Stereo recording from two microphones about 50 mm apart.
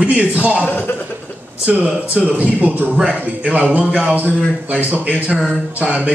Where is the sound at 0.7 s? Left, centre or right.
Left.